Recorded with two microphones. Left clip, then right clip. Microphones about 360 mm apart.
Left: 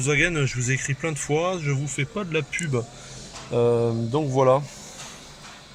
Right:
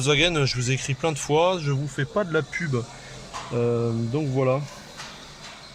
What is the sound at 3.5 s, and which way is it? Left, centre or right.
Mantra, left.